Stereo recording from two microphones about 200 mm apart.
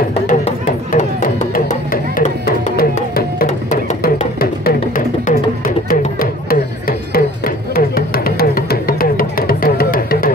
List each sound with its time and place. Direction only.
0.3 s music: 35° left (ahead or behind)